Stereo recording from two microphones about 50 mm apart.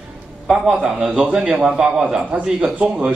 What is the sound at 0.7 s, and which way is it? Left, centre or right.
A man's voice, centre.